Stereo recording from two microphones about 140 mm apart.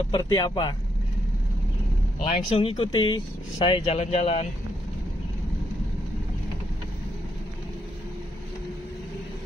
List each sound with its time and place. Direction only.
0.1 s speech: 25° left (ahead or behind)
2.5 s speech: 40° left (ahead or behind)